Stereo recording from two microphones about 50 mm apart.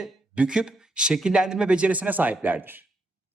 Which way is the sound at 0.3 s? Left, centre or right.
Centre.